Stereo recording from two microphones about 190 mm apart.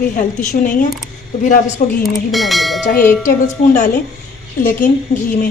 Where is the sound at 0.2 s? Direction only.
45° left (ahead or behind).